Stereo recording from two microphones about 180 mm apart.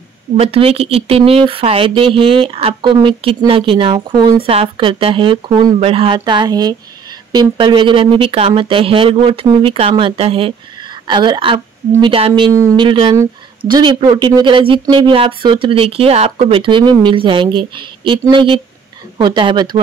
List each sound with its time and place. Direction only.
0.4 s speech: 35° right (ahead or behind)